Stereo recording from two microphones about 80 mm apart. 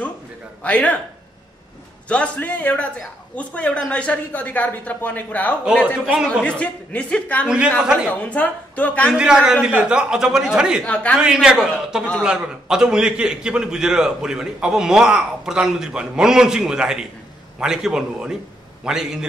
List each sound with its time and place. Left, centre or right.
0.7 s speech: centre
2.0 s speech: centre
5.9 s a man's voice: centre
6.4 s speech: centre
7.4 s a man's voice: centre
8.3 s speech: centre
9.1 s a man's voice: centre
10.8 s speech: centre
11.1 s a man's voice: centre